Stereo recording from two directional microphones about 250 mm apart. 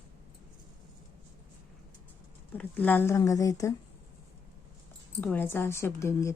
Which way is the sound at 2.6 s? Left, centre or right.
Centre.